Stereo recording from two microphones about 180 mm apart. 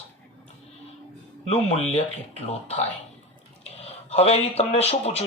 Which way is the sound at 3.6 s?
35° left (ahead or behind).